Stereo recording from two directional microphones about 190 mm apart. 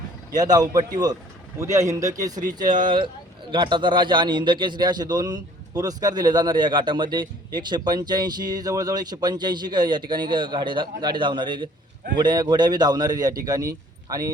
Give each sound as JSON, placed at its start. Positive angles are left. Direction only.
{"t": 0.3, "sound": "a man's voice", "side_deg": -20}
{"t": 2.6, "sound": "speech", "side_deg": -45}
{"t": 3.5, "sound": "a man's voice", "side_deg": -25}